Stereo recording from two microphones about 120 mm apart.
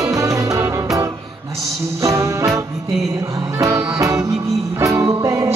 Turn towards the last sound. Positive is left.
turn(degrees=-25)  # may be behind; listen again after turning